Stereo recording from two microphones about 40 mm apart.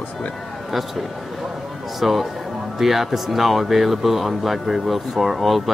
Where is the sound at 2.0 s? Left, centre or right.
Centre.